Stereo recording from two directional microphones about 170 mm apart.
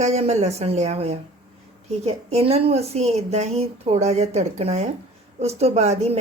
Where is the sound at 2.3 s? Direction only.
35° right (ahead or behind).